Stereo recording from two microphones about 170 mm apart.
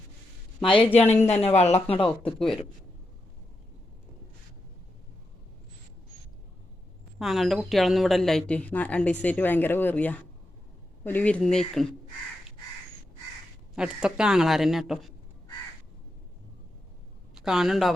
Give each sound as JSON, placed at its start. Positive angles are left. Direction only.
{"t": 0.6, "sound": "speech", "side_deg": 30}
{"t": 0.9, "sound": "a woman's voice", "side_deg": 10}
{"t": 1.3, "sound": "speech", "side_deg": 40}
{"t": 2.0, "sound": "speech", "side_deg": 5}
{"t": 7.2, "sound": "a woman's voice", "side_deg": 0}
{"t": 13.7, "sound": "speech", "side_deg": -5}
{"t": 17.4, "sound": "speech", "side_deg": 0}